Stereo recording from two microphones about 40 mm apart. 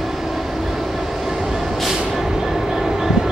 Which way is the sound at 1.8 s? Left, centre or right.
Centre.